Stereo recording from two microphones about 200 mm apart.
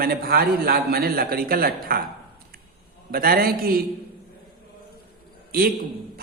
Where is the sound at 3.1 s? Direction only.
45° right (ahead or behind).